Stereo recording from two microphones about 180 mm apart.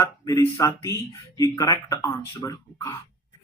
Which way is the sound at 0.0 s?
15° left (ahead or behind).